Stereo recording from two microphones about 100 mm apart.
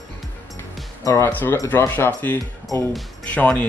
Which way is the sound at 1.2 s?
20° left (ahead or behind).